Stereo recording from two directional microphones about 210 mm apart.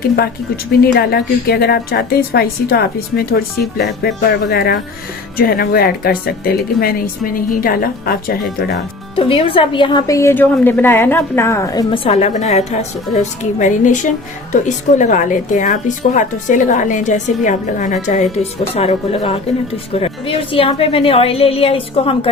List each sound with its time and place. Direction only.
0.2 s a woman's voice: 45° left (ahead or behind)
9.1 s a woman's voice: 25° left (ahead or behind)